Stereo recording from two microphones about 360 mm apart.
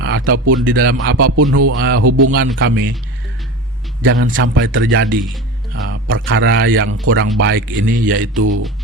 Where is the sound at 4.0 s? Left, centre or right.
Right.